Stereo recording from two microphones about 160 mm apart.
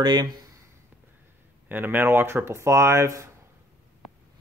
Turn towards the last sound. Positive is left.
turn(degrees=-20)  # may be behind; listen again after turning